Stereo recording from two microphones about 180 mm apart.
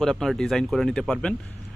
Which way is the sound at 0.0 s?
Centre (ahead or behind).